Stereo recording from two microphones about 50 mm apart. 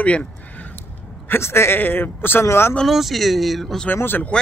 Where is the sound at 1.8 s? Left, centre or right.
Left.